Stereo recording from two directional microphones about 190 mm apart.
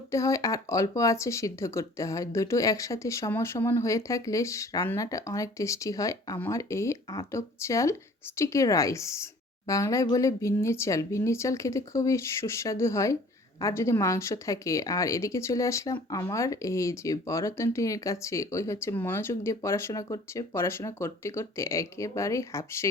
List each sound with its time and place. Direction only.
0.1 s speech: 15° left (ahead or behind)